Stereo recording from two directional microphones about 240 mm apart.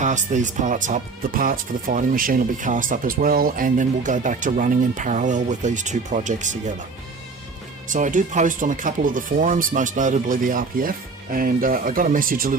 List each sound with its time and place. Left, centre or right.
0.0 s speech: right
7.9 s speech: right